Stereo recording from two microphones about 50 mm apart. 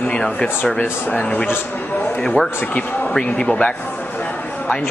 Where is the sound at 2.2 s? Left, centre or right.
Left.